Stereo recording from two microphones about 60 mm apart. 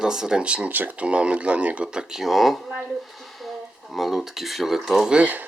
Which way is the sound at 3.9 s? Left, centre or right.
Centre.